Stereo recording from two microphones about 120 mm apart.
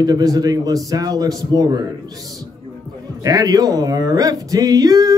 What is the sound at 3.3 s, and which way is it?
A man's voice, 30° right (ahead or behind).